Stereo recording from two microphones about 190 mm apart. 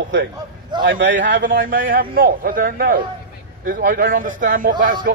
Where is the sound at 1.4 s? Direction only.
45° right (ahead or behind).